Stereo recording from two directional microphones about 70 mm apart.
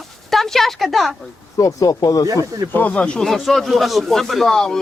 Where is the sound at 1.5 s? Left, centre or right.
Left.